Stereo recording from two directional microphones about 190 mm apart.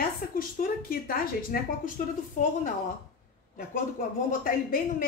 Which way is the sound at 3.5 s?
45° left (ahead or behind).